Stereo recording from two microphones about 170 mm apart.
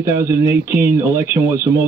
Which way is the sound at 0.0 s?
15° right (ahead or behind).